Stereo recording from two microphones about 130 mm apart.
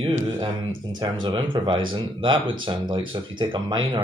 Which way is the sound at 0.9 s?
35° right (ahead or behind).